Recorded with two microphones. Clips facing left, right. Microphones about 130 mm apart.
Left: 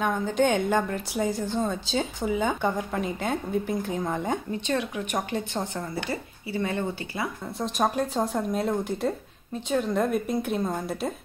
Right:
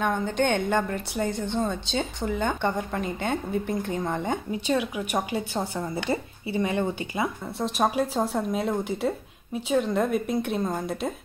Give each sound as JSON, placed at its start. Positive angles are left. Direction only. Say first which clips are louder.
{"t": 0.0, "sound": "a woman's voice", "louder": "left 1 dB", "side_deg": 0}
{"t": 7.5, "sound": "a woman's voice", "louder": "right 1 dB", "side_deg": 0}